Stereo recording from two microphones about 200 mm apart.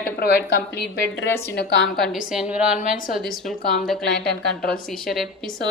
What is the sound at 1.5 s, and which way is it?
Speech, 55° left (ahead or behind).